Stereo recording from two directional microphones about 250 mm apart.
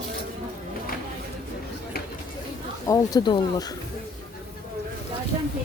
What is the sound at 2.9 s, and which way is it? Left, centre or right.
Speech, centre.